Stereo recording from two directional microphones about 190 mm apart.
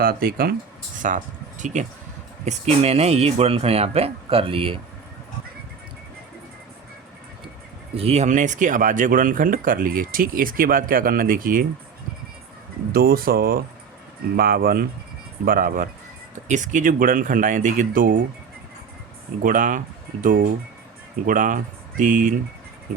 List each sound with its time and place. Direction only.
0.0 s speech: 50° right (ahead or behind)
1.0 s speech: 40° right (ahead or behind)
7.9 s speech: 35° right (ahead or behind); by 11.6 s 50° right (ahead or behind)
12.9 s speech: 50° right (ahead or behind)
19.4 s speech: 45° right (ahead or behind)
21.2 s speech: 45° right (ahead or behind)